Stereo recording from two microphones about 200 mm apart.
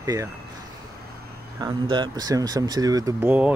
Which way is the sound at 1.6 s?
20° right (ahead or behind).